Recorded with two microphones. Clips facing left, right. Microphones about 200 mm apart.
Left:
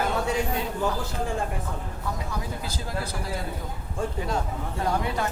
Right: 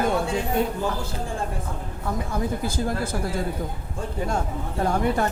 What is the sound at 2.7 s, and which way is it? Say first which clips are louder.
Speech: right 6 dB; 50° right (ahead or behind).